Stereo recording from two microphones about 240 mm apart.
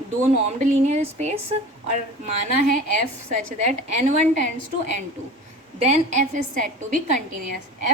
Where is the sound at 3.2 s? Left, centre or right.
Right.